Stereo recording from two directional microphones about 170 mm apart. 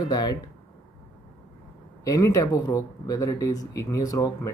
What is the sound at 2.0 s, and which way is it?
Speech, 20° left (ahead or behind).